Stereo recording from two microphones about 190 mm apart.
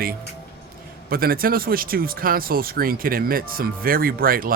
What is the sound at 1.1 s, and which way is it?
Speech, 50° right (ahead or behind).